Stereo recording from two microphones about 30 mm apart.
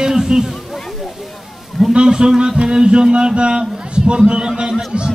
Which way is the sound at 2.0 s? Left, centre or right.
Right.